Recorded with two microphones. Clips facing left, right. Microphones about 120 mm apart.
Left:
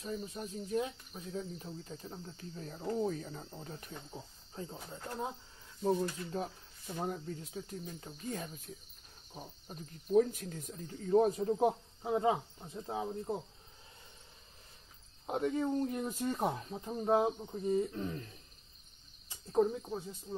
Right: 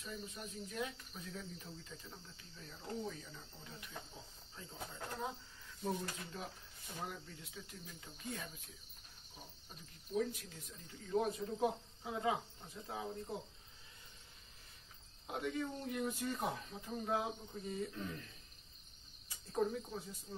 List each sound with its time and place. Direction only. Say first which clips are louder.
0.0 s speech: left 7 dB; 30° left (ahead or behind); by 3.9 s 50° left (ahead or behind)
4.6 s speech: left 11 dB; 40° left (ahead or behind)
5.9 s speech: left 9 dB; 35° left (ahead or behind)
15.2 s speech: left 7 dB; 35° left (ahead or behind)